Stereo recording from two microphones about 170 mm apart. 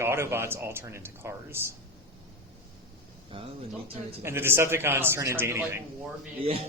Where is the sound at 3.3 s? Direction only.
30° right (ahead or behind).